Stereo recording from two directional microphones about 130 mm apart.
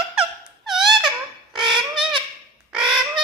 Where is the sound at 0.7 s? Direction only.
Centre (ahead or behind).